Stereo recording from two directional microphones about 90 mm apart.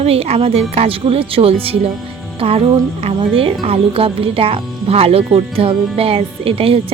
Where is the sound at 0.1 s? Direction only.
90° right.